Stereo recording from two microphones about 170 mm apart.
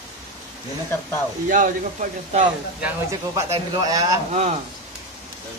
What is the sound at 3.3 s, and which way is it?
Speech, 20° right (ahead or behind).